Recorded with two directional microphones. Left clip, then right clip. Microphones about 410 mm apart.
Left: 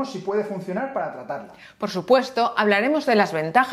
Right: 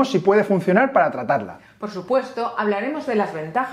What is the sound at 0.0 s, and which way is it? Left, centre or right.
Speech, right.